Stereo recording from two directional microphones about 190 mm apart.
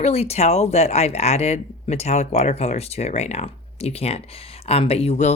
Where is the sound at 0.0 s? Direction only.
35° left (ahead or behind).